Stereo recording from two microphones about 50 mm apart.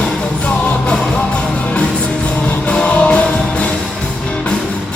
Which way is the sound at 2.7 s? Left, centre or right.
Left.